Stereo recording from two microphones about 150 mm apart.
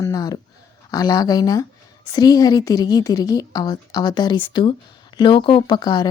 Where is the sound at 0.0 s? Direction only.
25° left (ahead or behind).